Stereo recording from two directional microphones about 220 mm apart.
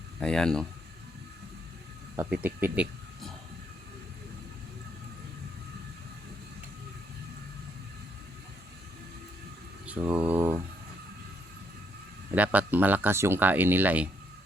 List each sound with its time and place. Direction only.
0.2 s speech: 5° left (ahead or behind)
2.1 s speech: 10° right (ahead or behind)
9.8 s speech: 10° right (ahead or behind)
12.3 s speech: 5° right (ahead or behind)